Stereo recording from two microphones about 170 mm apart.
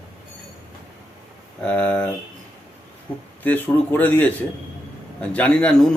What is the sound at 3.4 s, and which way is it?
Speech, 10° left (ahead or behind).